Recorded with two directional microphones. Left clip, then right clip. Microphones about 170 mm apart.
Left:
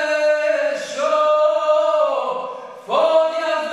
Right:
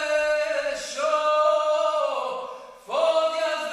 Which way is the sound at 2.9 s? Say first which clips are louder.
Left 7 dB; 40° right (ahead or behind).